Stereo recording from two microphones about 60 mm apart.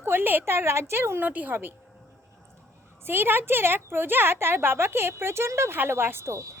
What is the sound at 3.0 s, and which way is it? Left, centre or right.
A woman's voice, right.